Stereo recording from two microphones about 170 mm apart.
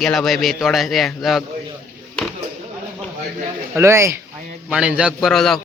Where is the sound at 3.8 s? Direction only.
15° right (ahead or behind).